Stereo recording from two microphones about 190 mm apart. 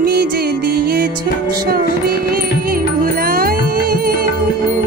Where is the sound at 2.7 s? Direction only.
50° right (ahead or behind).